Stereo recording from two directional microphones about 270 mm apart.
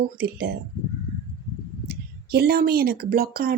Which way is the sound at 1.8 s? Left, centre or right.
Right.